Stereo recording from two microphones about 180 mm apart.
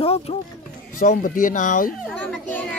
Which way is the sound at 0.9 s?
50° left (ahead or behind).